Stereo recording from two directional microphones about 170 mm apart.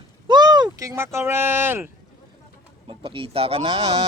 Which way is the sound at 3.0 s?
30° right (ahead or behind).